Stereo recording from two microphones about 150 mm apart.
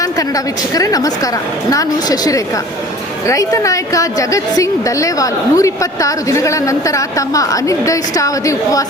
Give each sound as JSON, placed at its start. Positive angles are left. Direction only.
{"t": 0.0, "sound": "a woman's voice", "side_deg": 20}